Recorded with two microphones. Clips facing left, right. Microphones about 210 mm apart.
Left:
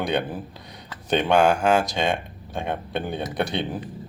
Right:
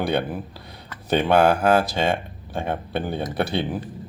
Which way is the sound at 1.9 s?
15° left (ahead or behind).